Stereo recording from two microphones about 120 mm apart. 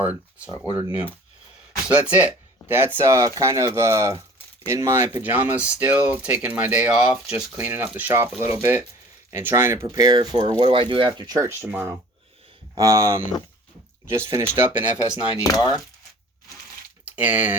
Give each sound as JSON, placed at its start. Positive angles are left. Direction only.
{"t": 0.0, "sound": "speech", "side_deg": -10}
{"t": 1.9, "sound": "speech", "side_deg": -10}
{"t": 9.9, "sound": "speech", "side_deg": -35}
{"t": 14.3, "sound": "speech", "side_deg": -25}
{"t": 14.8, "sound": "speech", "side_deg": -10}
{"t": 15.4, "sound": "speech", "side_deg": 30}
{"t": 17.2, "sound": "speech", "side_deg": -15}